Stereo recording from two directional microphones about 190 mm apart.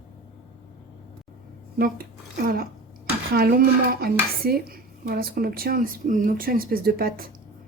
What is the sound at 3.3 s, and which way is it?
Speech, 50° right (ahead or behind).